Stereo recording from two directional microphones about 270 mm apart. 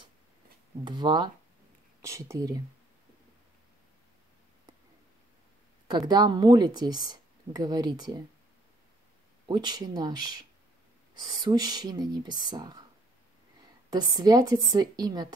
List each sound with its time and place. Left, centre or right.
0.8 s speech: centre
5.9 s speech: centre
9.5 s speech: centre
11.4 s speech: centre
13.9 s speech: centre